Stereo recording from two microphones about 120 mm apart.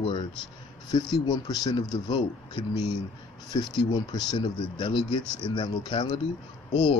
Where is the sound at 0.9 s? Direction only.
35° left (ahead or behind).